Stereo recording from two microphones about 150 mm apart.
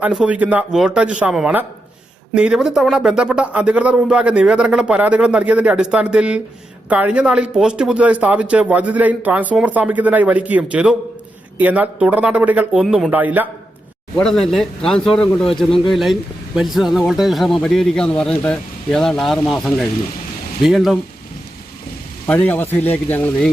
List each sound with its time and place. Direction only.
0.0 s a man's voice: 5° right (ahead or behind)
14.2 s speech: centre (ahead or behind)
22.3 s speech: 10° left (ahead or behind)